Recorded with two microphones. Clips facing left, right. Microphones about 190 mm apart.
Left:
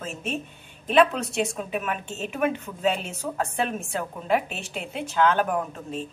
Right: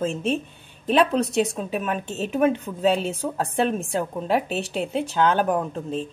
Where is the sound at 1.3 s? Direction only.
35° right (ahead or behind).